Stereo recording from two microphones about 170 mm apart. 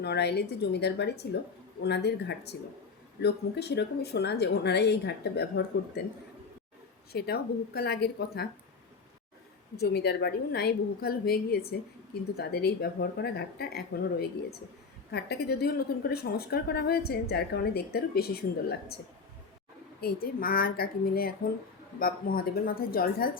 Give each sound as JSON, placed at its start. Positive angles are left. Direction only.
{"t": 0.0, "sound": "a woman's voice", "side_deg": 75}
{"t": 7.1, "sound": "a woman's voice", "side_deg": 70}
{"t": 9.7, "sound": "a woman's voice", "side_deg": 70}
{"t": 20.0, "sound": "speech", "side_deg": 65}